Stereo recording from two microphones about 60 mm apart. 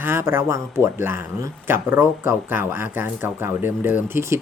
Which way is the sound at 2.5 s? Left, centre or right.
Right.